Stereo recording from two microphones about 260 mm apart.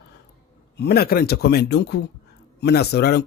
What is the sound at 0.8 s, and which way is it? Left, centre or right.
Speech, left.